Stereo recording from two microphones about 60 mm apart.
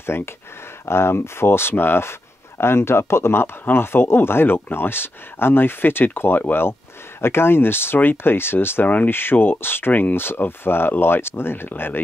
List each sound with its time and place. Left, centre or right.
0.0 s speech: left